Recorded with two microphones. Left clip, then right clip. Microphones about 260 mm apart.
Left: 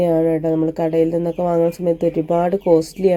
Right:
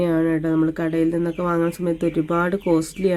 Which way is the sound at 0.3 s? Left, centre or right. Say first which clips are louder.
Left 3 dB; centre.